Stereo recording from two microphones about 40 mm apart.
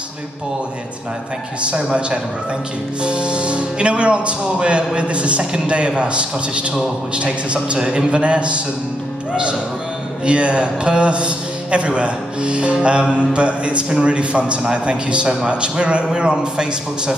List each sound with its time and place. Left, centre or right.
1.6 s a man's voice: right
10.2 s a man's voice: right